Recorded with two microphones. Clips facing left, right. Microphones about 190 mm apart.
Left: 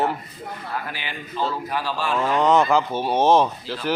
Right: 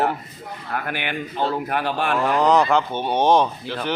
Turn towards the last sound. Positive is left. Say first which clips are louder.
# even
turn(degrees=5)  # may be behind; listen again after turning